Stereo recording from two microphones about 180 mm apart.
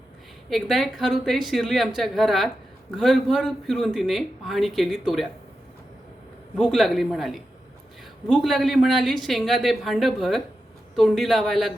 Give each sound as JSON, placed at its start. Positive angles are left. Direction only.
{"t": 0.5, "sound": "speech", "side_deg": 0}
{"t": 6.6, "sound": "speech", "side_deg": 0}